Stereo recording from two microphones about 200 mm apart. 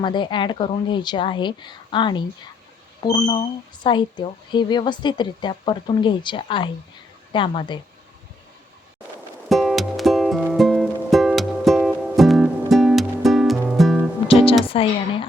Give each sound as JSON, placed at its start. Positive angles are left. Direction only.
{"t": 0.0, "sound": "speech", "side_deg": 25}
{"t": 9.5, "sound": "music", "side_deg": 0}
{"t": 14.7, "sound": "speech", "side_deg": 25}